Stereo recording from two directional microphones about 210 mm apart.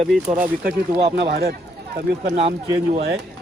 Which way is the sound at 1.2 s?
50° right (ahead or behind).